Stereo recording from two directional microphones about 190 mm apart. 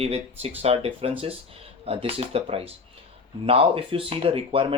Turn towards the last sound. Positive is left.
turn(degrees=-30)  # may be behind; listen again after turning